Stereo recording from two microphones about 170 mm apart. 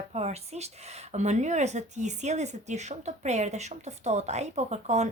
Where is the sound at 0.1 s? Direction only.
40° right (ahead or behind).